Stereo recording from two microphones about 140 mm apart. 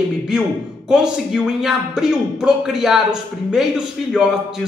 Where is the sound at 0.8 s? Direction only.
5° right (ahead or behind).